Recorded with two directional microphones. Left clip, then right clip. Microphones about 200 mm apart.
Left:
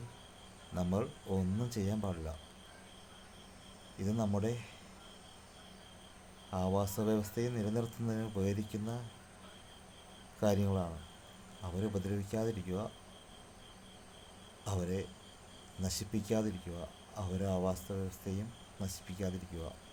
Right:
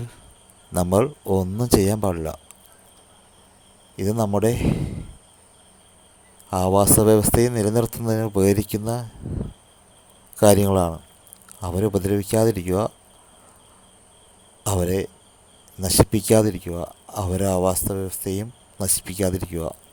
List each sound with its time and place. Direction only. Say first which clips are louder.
0.7 s speech: right 18 dB; 50° right (ahead or behind)
3.9 s speech: right 15 dB; 45° right (ahead or behind)
6.5 s speech: right 18 dB; 50° right (ahead or behind)
10.4 s speech: right 18 dB; 50° right (ahead or behind)
14.6 s speech: right 16 dB; 45° right (ahead or behind)